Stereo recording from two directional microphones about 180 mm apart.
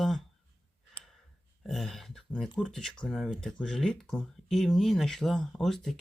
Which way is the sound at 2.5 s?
5° left (ahead or behind).